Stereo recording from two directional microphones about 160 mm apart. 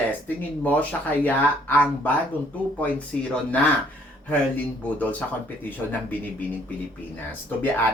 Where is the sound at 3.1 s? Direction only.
5° left (ahead or behind).